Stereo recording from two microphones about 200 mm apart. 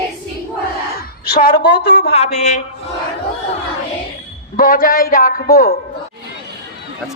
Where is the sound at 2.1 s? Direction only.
35° left (ahead or behind).